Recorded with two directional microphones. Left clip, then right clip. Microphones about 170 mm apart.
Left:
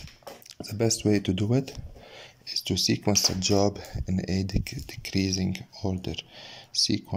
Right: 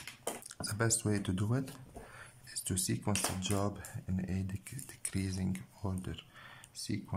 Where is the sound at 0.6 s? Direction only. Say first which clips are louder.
Left 9 dB; 10° left (ahead or behind).